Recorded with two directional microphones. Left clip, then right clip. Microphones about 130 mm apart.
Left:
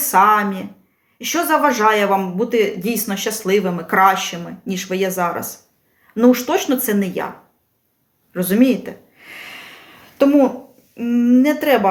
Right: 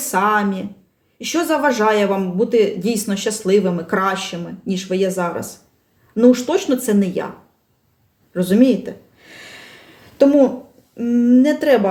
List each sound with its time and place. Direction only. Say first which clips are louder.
0.1 s speech: left 4 dB; 30° right (ahead or behind)
8.3 s a sound: right 1 dB; 20° right (ahead or behind)
10.9 s speech: right 1 dB; 25° right (ahead or behind)